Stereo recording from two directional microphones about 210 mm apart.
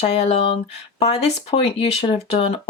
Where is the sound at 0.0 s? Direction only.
30° left (ahead or behind).